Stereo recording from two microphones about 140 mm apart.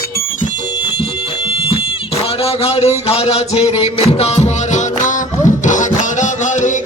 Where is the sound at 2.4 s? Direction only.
45° left (ahead or behind).